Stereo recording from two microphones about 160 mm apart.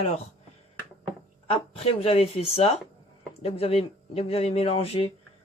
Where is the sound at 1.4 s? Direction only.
40° left (ahead or behind).